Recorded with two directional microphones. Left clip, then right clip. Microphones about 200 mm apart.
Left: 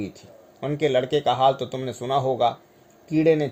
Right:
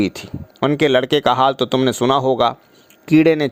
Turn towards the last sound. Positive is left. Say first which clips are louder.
# right 6 dB
turn(degrees=-35)  # may be behind; listen again after turning